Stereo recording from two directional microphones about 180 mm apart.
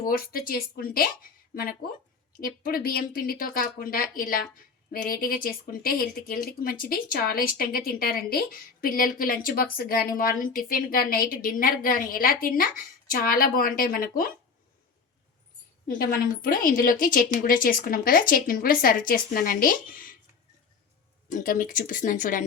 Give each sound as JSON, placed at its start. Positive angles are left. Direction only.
{"t": 0.0, "sound": "speech", "side_deg": 55}
{"t": 2.4, "sound": "speech", "side_deg": 55}
{"t": 15.9, "sound": "speech", "side_deg": 55}
{"t": 21.2, "sound": "speech", "side_deg": 50}